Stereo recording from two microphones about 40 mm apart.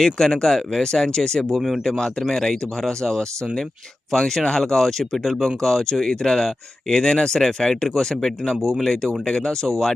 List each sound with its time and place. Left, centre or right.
0.0 s speech: centre
1.5 s speech: centre
1.8 s speech: centre